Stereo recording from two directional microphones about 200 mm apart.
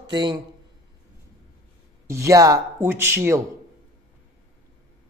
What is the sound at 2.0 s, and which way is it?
Speech, 15° right (ahead or behind).